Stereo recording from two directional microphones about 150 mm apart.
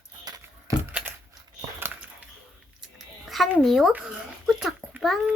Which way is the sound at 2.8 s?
Centre (ahead or behind).